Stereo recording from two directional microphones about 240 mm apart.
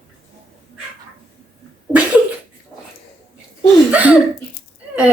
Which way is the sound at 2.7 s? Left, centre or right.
Centre.